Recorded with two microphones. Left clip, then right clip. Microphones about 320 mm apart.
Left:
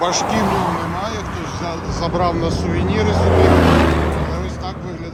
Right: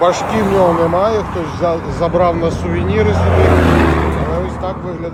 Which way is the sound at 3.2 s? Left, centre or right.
Left.